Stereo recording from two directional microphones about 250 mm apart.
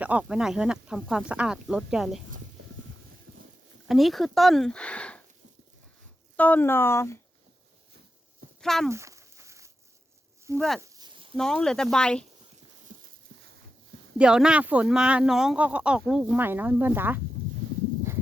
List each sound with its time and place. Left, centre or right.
0.0 s speech: centre
3.8 s speech: centre
6.3 s speech: centre
8.6 s speech: centre
8.9 s a sound: centre
10.8 s a sound: centre
11.3 s speech: centre
14.2 s speech: centre